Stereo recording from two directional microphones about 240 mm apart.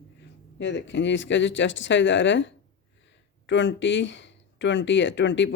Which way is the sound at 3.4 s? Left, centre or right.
Left.